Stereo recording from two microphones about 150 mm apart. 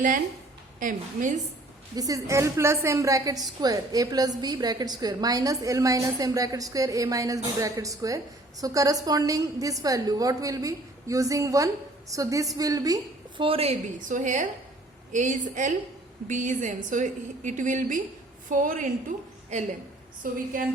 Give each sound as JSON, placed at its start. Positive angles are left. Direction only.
{"t": 0.8, "sound": "a woman's voice", "side_deg": -60}
{"t": 2.0, "sound": "a woman's voice", "side_deg": -25}
{"t": 13.4, "sound": "a woman's voice", "side_deg": -40}
{"t": 20.2, "sound": "a woman's voice", "side_deg": -70}